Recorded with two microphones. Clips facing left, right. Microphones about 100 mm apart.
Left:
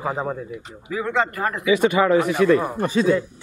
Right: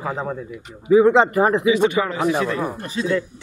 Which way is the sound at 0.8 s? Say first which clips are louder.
Right 10 dB; 25° right (ahead or behind).